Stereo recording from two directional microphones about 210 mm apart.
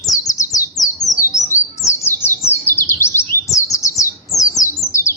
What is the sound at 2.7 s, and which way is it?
Chirp, 10° left (ahead or behind).